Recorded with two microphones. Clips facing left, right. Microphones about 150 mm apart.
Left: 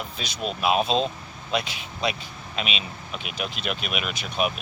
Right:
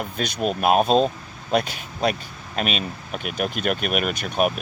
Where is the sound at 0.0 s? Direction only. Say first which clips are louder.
Right 7 dB; 50° right (ahead or behind).